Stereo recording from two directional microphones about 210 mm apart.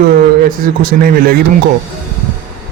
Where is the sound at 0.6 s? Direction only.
45° right (ahead or behind).